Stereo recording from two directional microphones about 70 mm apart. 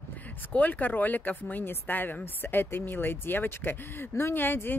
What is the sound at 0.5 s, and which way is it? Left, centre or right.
Speech, left.